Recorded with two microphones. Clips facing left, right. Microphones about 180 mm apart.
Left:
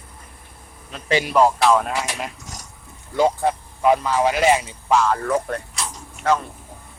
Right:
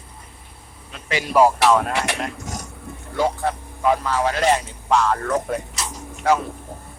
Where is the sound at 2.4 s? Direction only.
55° right (ahead or behind).